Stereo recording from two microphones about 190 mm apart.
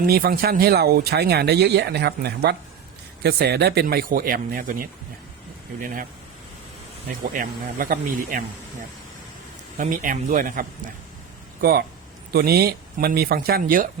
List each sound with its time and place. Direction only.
0.0 s speech: 50° right (ahead or behind)
7.2 s speech: 45° right (ahead or behind)
9.7 s speech: 45° right (ahead or behind)
11.6 s speech: 55° right (ahead or behind)